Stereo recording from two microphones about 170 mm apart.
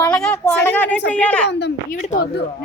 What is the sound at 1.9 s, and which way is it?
Speech, 50° left (ahead or behind).